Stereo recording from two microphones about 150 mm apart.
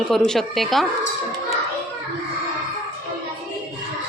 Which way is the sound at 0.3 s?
Centre (ahead or behind).